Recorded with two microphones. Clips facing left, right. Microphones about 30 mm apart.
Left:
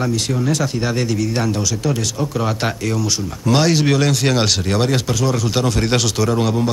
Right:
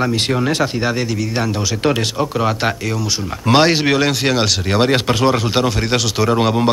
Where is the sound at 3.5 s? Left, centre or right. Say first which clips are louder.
Right 3 dB; right.